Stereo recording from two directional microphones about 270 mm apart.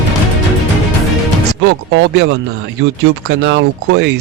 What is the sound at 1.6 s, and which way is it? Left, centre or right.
Speech, right.